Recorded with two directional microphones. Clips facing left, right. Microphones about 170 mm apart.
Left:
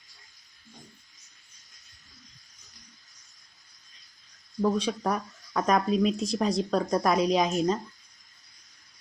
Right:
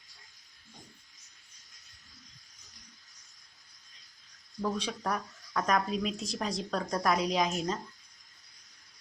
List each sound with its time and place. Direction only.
4.6 s speech: 25° left (ahead or behind)